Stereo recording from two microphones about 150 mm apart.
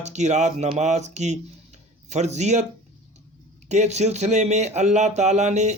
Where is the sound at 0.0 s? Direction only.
50° right (ahead or behind).